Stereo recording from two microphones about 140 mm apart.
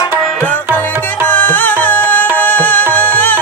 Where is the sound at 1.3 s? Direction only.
10° left (ahead or behind).